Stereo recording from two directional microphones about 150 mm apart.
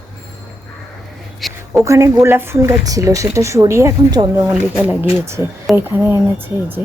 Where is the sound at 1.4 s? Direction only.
Centre (ahead or behind).